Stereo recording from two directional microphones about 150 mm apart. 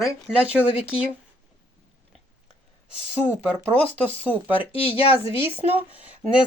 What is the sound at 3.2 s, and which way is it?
Speech, 10° left (ahead or behind).